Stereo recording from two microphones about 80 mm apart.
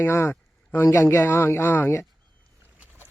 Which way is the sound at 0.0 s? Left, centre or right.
Left.